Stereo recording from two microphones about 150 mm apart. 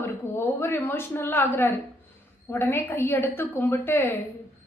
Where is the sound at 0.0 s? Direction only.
15° left (ahead or behind).